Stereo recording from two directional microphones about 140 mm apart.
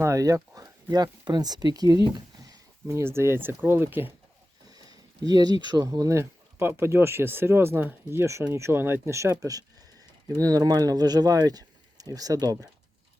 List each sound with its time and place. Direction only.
0.0 s speech: 20° right (ahead or behind)
4.7 s speech: 25° right (ahead or behind)